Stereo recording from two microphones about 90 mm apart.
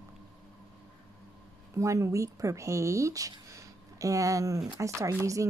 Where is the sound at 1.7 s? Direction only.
35° right (ahead or behind).